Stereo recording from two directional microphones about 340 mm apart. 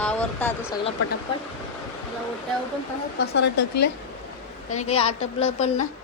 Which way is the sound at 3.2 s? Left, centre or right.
Left.